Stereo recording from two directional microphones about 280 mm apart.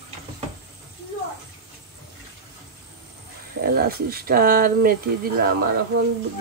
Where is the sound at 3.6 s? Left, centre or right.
Right.